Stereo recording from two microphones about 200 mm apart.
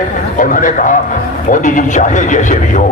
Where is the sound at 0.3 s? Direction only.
40° left (ahead or behind).